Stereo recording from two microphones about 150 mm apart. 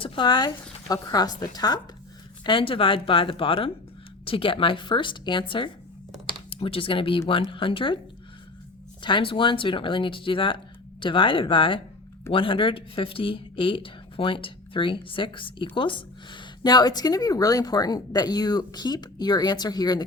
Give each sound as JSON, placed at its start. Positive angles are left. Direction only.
{"t": 0.0, "sound": "speech", "side_deg": 30}
{"t": 9.0, "sound": "speech", "side_deg": 30}